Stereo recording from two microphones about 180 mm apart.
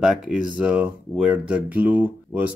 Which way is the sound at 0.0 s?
5° right (ahead or behind).